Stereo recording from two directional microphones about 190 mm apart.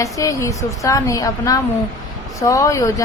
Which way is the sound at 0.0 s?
15° left (ahead or behind).